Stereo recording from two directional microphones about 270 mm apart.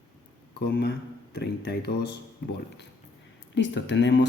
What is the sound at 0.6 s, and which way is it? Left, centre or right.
A man's voice, left.